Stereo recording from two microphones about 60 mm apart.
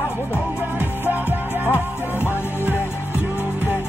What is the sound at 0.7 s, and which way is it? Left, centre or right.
Music, right.